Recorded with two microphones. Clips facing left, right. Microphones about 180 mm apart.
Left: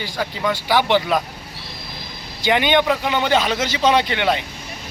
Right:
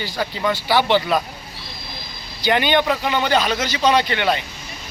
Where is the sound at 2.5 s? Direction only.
15° left (ahead or behind).